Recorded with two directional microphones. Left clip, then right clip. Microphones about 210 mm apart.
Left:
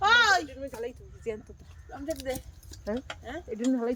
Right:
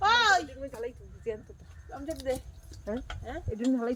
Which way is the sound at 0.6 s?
55° left (ahead or behind).